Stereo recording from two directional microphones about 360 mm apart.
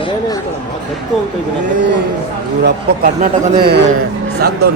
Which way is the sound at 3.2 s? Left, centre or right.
Right.